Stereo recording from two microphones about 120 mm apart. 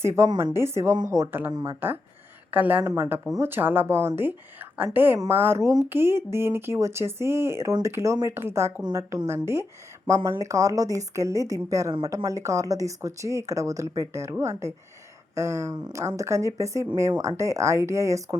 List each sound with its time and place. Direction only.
0.0 s speech: 25° right (ahead or behind)